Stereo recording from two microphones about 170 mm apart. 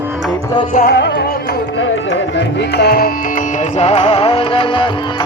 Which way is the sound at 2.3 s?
70° left (ahead or behind).